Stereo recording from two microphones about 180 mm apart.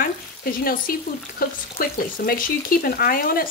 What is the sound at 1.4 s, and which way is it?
Frying, 55° left (ahead or behind).